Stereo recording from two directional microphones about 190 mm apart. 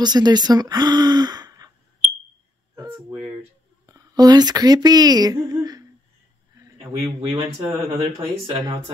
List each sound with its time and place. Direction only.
0.0 s speech: 20° right (ahead or behind)
2.7 s a sound: 15° right (ahead or behind)
3.8 s speech: 20° right (ahead or behind)
7.0 s speech: 25° right (ahead or behind)